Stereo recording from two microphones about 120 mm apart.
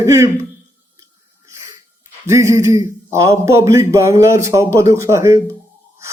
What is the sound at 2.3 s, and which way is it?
A man's voice, 25° right (ahead or behind).